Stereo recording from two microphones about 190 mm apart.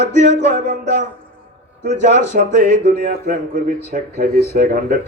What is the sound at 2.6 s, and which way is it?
Speech, 60° right (ahead or behind).